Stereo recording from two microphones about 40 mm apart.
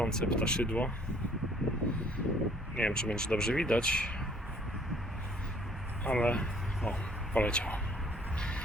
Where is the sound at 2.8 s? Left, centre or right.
Left.